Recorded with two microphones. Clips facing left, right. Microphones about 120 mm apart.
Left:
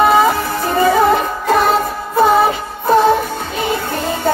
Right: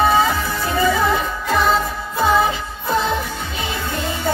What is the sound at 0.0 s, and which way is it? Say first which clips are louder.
Music: left 4 dB; 50° left (ahead or behind).